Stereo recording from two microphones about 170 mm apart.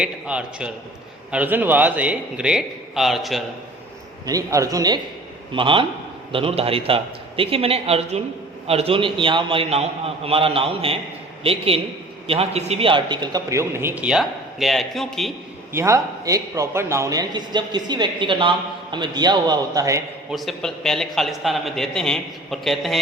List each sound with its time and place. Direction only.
0.0 s a man's voice: 5° right (ahead or behind)
4.3 s a man's voice: 20° right (ahead or behind); by 15.3 s centre (ahead or behind)
15.7 s a man's voice: 15° right (ahead or behind)
20.3 s a man's voice: centre (ahead or behind)